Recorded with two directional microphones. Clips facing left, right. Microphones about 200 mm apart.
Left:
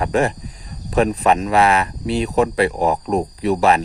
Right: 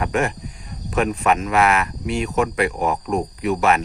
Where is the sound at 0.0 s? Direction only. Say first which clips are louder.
Left 3 dB; 35° left (ahead or behind).